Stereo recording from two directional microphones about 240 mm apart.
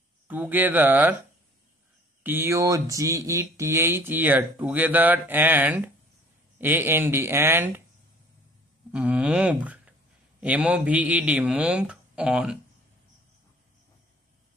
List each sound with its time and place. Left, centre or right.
0.3 s speech: centre
2.2 s speech: centre
8.9 s speech: centre